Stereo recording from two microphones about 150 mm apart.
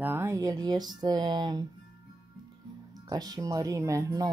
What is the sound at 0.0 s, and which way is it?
Speech, 15° right (ahead or behind).